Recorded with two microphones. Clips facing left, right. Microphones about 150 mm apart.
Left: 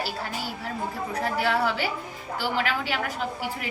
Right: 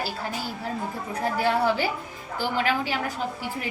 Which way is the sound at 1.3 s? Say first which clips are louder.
Right 3 dB; 45° right (ahead or behind).